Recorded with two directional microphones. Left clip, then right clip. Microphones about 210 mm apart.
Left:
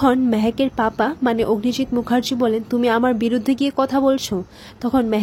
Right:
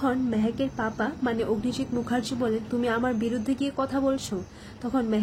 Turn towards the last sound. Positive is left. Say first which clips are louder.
# left 8 dB
turn(degrees=45)  # may be behind; listen again after turning